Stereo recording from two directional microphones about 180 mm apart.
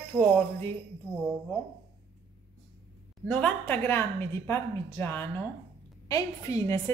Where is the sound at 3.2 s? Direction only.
5° left (ahead or behind).